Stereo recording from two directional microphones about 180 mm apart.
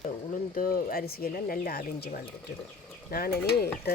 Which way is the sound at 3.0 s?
55° left (ahead or behind).